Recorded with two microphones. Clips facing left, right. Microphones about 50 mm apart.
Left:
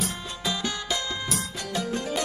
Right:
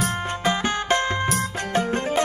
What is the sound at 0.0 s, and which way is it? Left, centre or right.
Music, right.